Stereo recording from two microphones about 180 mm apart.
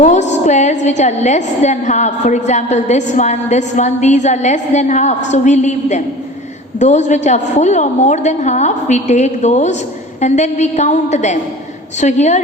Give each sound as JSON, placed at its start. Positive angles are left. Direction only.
{"t": 0.0, "sound": "a woman's voice", "side_deg": 40}